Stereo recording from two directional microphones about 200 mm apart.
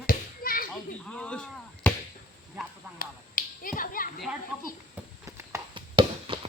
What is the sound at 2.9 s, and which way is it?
Finger snapping, 45° left (ahead or behind).